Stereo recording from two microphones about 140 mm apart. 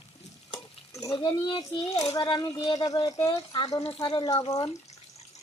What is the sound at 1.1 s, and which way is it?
A woman's voice, 35° left (ahead or behind).